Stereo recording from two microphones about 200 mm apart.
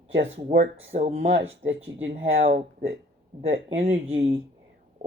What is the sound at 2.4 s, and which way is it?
Speech, 35° right (ahead or behind).